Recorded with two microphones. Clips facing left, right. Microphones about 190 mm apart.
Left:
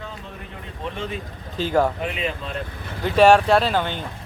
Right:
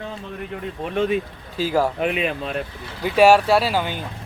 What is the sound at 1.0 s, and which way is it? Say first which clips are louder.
Speech: right 12 dB; 60° right (ahead or behind).